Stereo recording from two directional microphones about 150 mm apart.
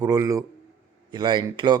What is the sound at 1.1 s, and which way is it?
Speech, 30° right (ahead or behind).